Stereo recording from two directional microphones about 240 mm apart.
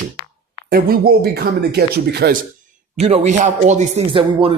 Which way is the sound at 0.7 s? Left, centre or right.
Right.